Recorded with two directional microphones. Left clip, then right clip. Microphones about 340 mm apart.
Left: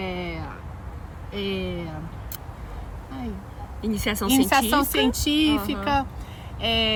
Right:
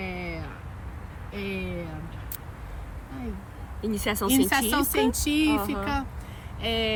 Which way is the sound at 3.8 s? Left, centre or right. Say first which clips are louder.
Left 1 dB; centre.